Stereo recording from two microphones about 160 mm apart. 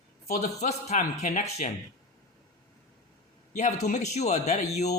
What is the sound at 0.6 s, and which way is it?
Speech, 45° left (ahead or behind).